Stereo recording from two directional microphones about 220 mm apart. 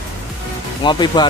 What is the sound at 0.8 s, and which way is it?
Speech, 20° left (ahead or behind).